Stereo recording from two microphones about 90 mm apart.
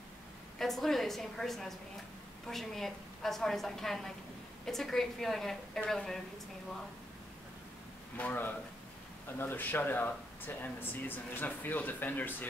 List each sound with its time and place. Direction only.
0.6 s a woman's voice: 5° left (ahead or behind)
8.2 s speech: 20° left (ahead or behind)